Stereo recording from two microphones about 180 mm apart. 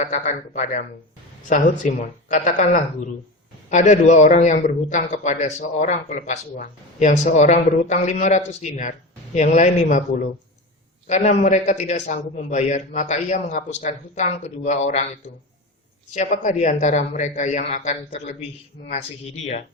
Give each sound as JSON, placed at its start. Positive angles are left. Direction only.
{"t": 0.0, "sound": "a man's voice", "side_deg": 45}
{"t": 16.1, "sound": "a man's voice", "side_deg": 40}